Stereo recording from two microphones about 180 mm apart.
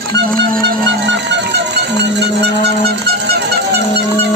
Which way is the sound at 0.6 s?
75° right (ahead or behind).